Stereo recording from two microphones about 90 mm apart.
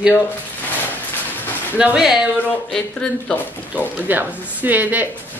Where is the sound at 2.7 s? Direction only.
10° left (ahead or behind).